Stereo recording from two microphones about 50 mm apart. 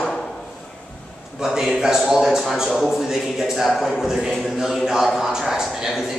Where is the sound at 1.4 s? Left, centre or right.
Centre.